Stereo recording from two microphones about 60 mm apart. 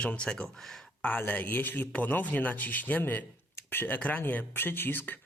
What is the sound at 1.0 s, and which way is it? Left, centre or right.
Speech, left.